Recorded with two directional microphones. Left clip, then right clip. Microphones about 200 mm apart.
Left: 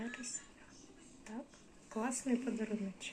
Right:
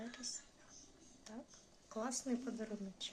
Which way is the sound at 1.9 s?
5° right (ahead or behind).